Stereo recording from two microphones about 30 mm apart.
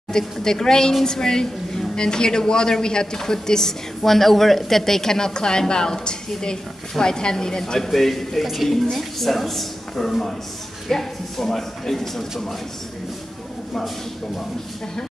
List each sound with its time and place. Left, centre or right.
0.1 s a woman's voice: centre
7.9 s a man's voice: centre